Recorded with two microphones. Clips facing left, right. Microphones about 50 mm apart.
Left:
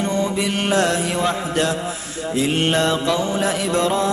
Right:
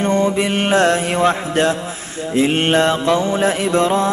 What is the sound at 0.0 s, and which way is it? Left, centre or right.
Mantra, right.